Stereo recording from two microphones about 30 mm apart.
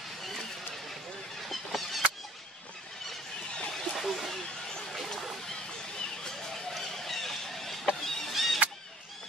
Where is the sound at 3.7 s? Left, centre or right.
Centre.